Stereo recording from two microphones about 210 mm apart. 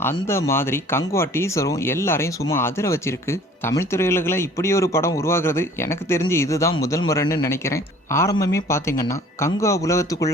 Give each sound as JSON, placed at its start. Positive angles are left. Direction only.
{"t": 0.0, "sound": "speech", "side_deg": 10}